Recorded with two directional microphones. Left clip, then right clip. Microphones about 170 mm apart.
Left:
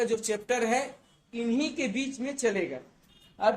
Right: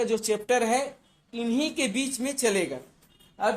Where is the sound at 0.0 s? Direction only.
35° right (ahead or behind).